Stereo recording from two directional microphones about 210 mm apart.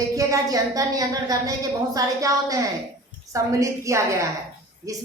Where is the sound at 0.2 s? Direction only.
15° right (ahead or behind).